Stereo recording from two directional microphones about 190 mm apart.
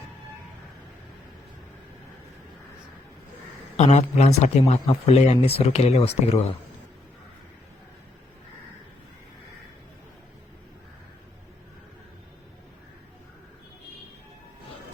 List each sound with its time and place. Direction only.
3.8 s speech: 35° left (ahead or behind)